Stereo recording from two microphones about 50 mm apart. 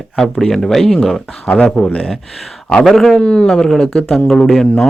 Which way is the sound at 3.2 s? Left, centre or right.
Centre.